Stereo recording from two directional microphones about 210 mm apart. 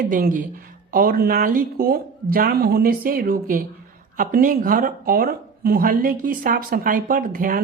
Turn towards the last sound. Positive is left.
turn(degrees=-40)  # may be behind; listen again after turning